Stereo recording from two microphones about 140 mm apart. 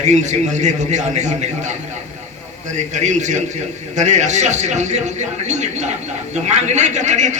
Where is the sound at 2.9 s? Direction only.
55° right (ahead or behind).